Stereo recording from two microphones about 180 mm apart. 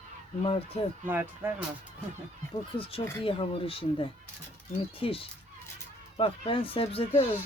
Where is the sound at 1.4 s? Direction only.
10° right (ahead or behind).